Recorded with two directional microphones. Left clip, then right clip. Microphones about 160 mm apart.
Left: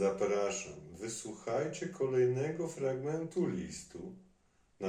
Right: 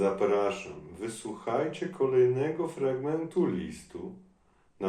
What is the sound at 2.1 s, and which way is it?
Speech, 15° left (ahead or behind).